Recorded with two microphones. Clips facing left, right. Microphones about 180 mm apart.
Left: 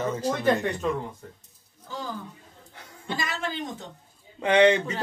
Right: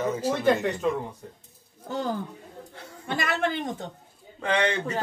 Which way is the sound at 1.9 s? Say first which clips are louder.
Right 6 dB; 60° right (ahead or behind).